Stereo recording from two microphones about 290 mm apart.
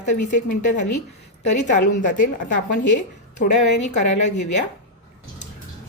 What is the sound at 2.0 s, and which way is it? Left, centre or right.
Speech, left.